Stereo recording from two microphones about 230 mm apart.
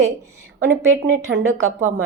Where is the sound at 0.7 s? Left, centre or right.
Right.